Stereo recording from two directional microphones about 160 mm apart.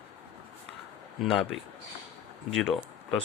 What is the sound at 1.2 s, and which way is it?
Speech, centre (ahead or behind).